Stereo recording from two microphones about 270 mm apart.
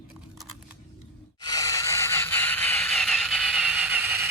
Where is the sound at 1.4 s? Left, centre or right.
Centre.